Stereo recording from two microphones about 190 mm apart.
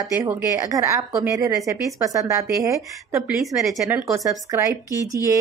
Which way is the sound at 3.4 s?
Centre (ahead or behind).